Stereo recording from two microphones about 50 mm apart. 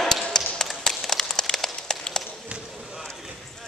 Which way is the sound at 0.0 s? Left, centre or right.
Centre.